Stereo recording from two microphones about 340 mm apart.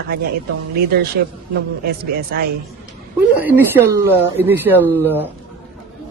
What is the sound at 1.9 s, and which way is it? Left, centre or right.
Speech, right.